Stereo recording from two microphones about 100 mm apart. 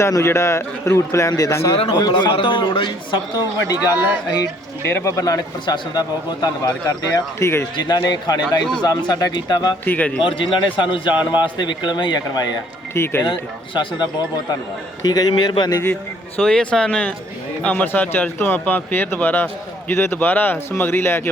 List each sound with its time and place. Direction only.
0.0 s a man's voice: 30° left (ahead or behind)
1.7 s a man's voice: 70° left (ahead or behind)
2.0 s a man's voice: 45° left (ahead or behind)
3.9 s speech: 15° right (ahead or behind)
4.8 s a man's voice: 20° left (ahead or behind)
5.6 s a man's voice: 45° left (ahead or behind); by 7.7 s 25° left (ahead or behind)
7.8 s a man's voice: 45° left (ahead or behind)
9.8 s speech: 15° left (ahead or behind)
10.2 s a man's voice: 60° left (ahead or behind)
12.9 s a man's voice: 25° left (ahead or behind)
13.7 s a man's voice: 45° left (ahead or behind)
16.4 s a man's voice: 10° left (ahead or behind); by 21.2 s 25° left (ahead or behind)